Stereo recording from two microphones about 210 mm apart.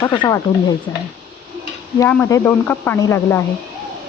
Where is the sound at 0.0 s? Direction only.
20° left (ahead or behind).